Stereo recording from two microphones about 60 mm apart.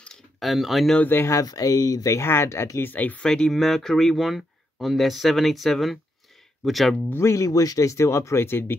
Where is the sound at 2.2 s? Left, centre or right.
Left.